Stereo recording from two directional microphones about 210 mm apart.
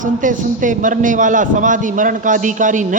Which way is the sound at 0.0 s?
40° right (ahead or behind).